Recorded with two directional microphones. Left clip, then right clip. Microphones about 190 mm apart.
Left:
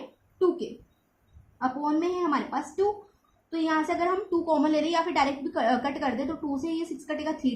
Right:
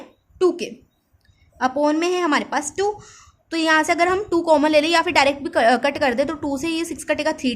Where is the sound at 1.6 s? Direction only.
50° right (ahead or behind).